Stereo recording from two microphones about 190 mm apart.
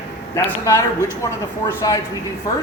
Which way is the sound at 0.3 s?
15° left (ahead or behind).